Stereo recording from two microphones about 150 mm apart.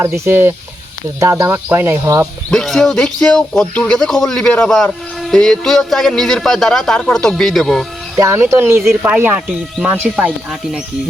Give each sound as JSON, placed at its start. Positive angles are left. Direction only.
{"t": 0.0, "sound": "speech", "side_deg": -15}
{"t": 2.5, "sound": "speech", "side_deg": 0}
{"t": 8.1, "sound": "speech", "side_deg": -20}